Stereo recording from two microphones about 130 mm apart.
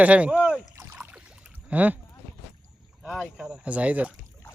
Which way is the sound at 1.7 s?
10° right (ahead or behind).